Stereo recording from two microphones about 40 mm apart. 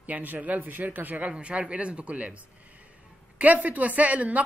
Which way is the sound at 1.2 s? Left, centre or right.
Right.